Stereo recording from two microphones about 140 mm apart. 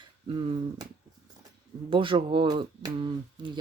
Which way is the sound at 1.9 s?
40° right (ahead or behind).